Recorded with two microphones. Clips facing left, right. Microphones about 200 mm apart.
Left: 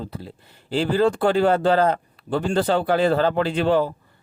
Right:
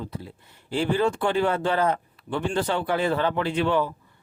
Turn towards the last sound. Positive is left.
turn(degrees=35)  # may be behind; listen again after turning